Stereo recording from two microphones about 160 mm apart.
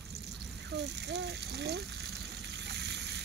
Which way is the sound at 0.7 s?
90° right.